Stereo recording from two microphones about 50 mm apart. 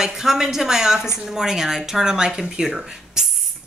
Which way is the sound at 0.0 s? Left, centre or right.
Centre.